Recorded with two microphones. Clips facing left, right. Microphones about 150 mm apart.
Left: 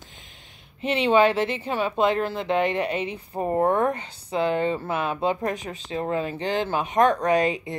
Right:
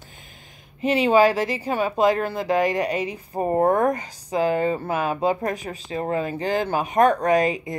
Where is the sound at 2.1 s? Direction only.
45° right (ahead or behind).